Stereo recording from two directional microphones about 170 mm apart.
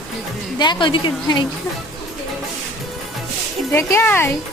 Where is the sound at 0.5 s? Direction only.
25° left (ahead or behind).